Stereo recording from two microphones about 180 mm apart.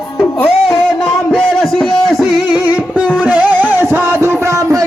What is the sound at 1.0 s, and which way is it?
Music, centre (ahead or behind).